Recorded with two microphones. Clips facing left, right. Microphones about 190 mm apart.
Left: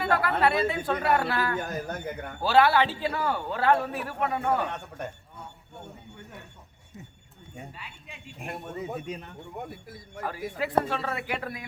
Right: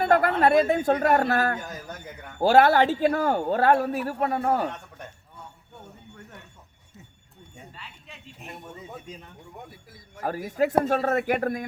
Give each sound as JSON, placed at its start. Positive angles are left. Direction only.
{"t": 0.0, "sound": "a man's voice", "side_deg": -45}
{"t": 1.5, "sound": "a man's voice", "side_deg": 60}
{"t": 2.4, "sound": "a man's voice", "side_deg": -45}
{"t": 4.7, "sound": "a man's voice", "side_deg": 60}
{"t": 7.8, "sound": "a man's voice", "side_deg": 10}
{"t": 8.4, "sound": "speech", "side_deg": 65}
{"t": 10.2, "sound": "a man's voice", "side_deg": -45}